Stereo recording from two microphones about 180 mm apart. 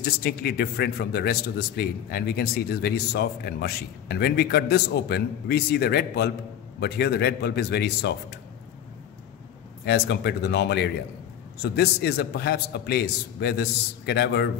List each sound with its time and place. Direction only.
0.0 s a man's voice: 60° left (ahead or behind)
9.8 s a man's voice: 65° left (ahead or behind)